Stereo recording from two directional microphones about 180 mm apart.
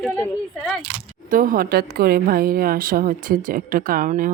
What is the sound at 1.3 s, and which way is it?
A woman's voice, 50° right (ahead or behind).